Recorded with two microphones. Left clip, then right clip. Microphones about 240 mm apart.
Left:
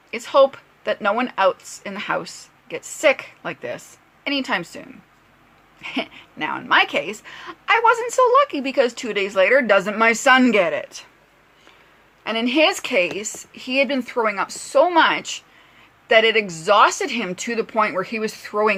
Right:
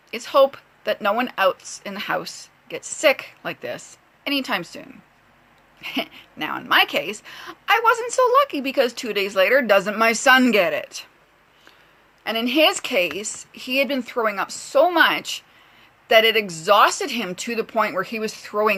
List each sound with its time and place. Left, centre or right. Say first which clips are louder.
0.1 s speech: left 1 dB; centre
12.2 s speech: even; centre